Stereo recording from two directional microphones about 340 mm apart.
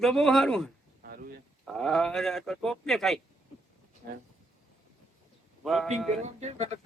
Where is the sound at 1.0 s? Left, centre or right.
Right.